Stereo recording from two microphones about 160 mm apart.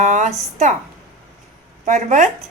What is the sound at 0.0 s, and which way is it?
Speech, 50° right (ahead or behind).